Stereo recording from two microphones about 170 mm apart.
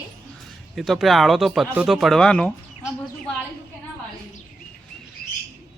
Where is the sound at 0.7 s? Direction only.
Centre (ahead or behind).